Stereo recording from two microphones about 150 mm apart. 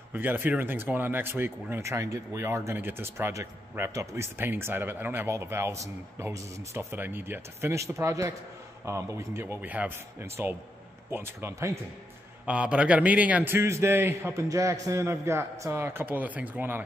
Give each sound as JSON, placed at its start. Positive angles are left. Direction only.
{"t": 0.1, "sound": "speech", "side_deg": -10}